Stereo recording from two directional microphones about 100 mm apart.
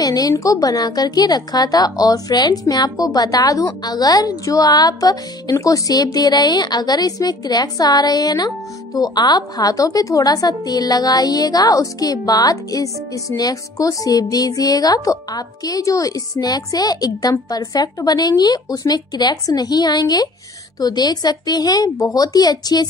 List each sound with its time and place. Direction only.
0.0 s a woman's voice: 40° left (ahead or behind)